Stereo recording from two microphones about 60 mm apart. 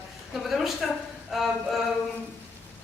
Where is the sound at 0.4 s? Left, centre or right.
Centre.